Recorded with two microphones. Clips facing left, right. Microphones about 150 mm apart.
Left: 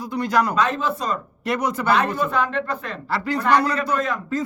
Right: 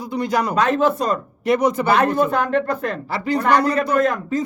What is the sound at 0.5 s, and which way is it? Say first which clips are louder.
Speech: right 5 dB; 60° right (ahead or behind).